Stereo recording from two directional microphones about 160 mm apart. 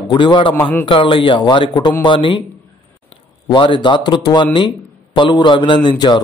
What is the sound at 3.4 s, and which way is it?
A man's voice, 30° left (ahead or behind).